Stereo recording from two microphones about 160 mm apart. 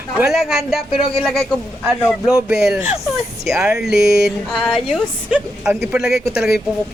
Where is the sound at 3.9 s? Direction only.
75° left (ahead or behind).